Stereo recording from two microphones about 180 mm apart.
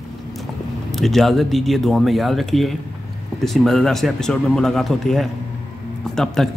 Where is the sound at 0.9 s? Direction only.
Centre (ahead or behind).